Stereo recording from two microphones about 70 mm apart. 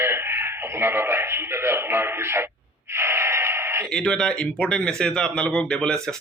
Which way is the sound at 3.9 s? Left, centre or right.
Centre.